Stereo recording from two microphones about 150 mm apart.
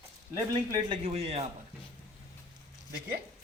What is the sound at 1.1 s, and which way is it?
Speech, 40° right (ahead or behind).